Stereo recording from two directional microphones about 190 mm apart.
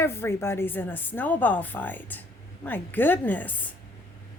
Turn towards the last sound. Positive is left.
turn(degrees=10)  # may be behind; listen again after turning